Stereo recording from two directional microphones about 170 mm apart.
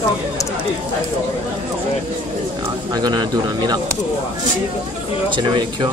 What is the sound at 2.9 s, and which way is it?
Speech, 25° right (ahead or behind).